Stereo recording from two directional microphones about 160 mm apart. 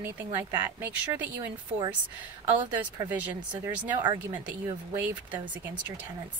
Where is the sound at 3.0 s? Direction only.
10° right (ahead or behind).